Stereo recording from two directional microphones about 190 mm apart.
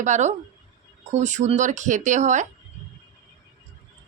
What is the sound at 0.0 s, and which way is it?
Speech, 40° right (ahead or behind).